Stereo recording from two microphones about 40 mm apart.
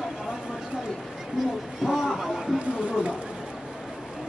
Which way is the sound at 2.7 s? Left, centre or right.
Right.